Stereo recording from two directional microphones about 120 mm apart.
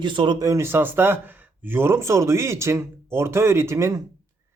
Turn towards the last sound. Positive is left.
turn(degrees=-25)  # may be behind; listen again after turning